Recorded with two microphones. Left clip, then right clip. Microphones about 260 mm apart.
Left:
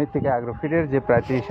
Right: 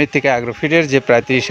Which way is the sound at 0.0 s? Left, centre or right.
Right.